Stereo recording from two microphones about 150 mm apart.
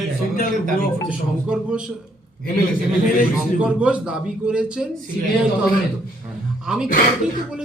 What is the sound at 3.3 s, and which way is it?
A man's voice, 10° right (ahead or behind).